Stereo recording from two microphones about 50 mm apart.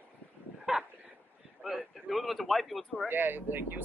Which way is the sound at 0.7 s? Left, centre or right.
Centre.